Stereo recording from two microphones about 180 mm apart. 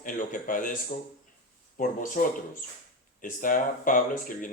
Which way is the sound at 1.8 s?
45° left (ahead or behind).